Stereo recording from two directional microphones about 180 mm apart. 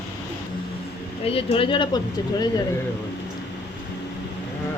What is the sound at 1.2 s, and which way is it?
Speech, 30° left (ahead or behind).